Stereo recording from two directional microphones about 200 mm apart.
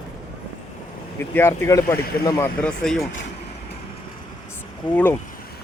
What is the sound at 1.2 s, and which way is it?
Speech, 10° left (ahead or behind).